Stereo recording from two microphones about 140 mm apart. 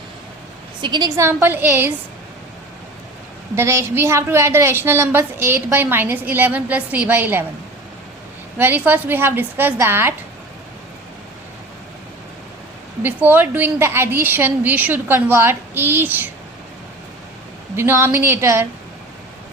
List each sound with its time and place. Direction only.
0.8 s a woman's voice: 30° right (ahead or behind); by 1.9 s 15° right (ahead or behind)
3.5 s a woman's voice: 20° right (ahead or behind)
8.5 s a woman's voice: 15° right (ahead or behind)
13.0 s a woman's voice: 15° right (ahead or behind)
17.7 s a woman's voice: 15° right (ahead or behind)